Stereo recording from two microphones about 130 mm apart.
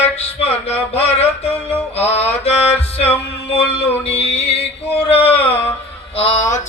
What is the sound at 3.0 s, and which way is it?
Music, 50° left (ahead or behind).